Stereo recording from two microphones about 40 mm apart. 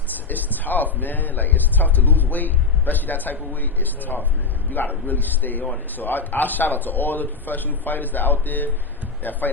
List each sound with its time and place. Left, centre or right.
0.3 s a man's voice: left